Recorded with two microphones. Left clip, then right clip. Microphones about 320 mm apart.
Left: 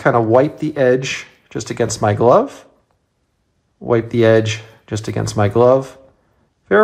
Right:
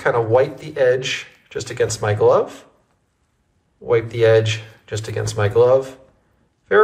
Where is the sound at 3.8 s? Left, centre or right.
Left.